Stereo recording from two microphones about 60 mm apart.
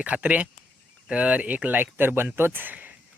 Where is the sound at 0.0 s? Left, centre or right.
Right.